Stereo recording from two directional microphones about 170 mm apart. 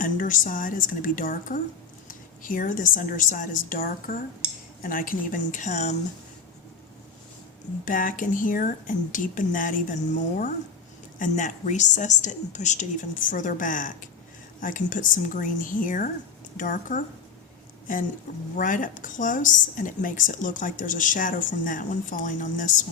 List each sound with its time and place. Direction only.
0.0 s a woman's voice: 50° left (ahead or behind)
7.9 s a woman's voice: 50° left (ahead or behind)
18.5 s a woman's voice: 50° left (ahead or behind)